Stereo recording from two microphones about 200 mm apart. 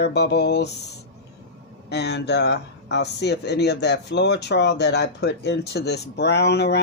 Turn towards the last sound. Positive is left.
turn(degrees=55)  # may be behind; listen again after turning